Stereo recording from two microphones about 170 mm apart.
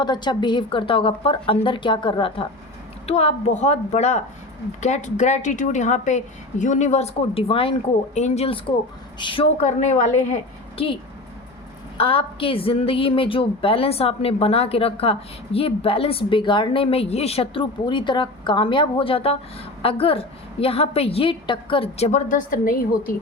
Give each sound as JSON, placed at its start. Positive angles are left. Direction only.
{"t": 0.0, "sound": "a woman's voice", "side_deg": 25}
{"t": 9.6, "sound": "speech", "side_deg": 45}
{"t": 10.8, "sound": "a woman's voice", "side_deg": 35}
{"t": 11.9, "sound": "a woman's voice", "side_deg": 35}